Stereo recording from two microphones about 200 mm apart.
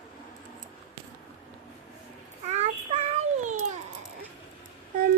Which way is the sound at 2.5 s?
35° right (ahead or behind).